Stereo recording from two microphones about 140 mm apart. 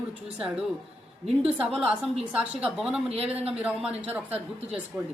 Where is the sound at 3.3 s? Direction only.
45° right (ahead or behind).